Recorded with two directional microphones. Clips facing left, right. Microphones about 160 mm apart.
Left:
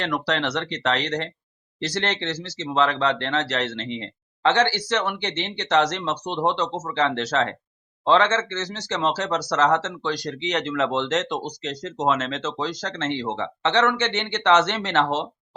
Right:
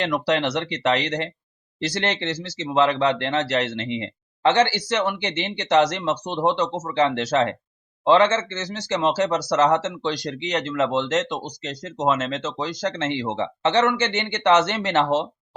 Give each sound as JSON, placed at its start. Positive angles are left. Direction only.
{"t": 0.0, "sound": "speech", "side_deg": -10}
{"t": 10.5, "sound": "speech", "side_deg": -5}